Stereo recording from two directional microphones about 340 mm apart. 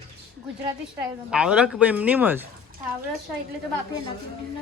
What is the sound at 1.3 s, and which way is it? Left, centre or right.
Speech, centre.